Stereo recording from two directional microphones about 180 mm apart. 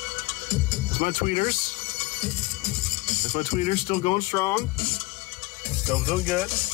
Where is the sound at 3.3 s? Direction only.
35° left (ahead or behind).